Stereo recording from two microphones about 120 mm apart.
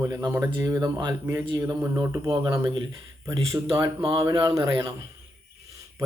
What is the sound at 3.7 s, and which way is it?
Speech, 40° right (ahead or behind).